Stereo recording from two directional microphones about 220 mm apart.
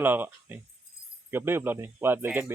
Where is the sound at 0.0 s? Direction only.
10° right (ahead or behind).